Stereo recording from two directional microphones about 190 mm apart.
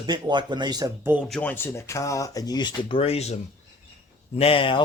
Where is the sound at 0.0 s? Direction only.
25° right (ahead or behind).